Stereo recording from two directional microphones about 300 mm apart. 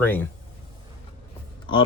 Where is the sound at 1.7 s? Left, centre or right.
Centre.